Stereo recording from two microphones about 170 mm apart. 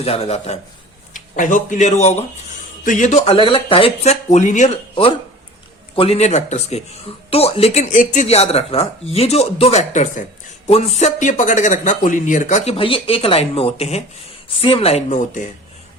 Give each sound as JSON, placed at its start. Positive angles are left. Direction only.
{"t": 0.0, "sound": "a man's voice", "side_deg": 35}
{"t": 1.1, "sound": "a man's voice", "side_deg": 50}
{"t": 6.0, "sound": "a man's voice", "side_deg": 40}